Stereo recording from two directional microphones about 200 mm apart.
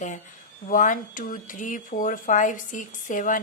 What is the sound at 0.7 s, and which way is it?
Speech, 40° left (ahead or behind).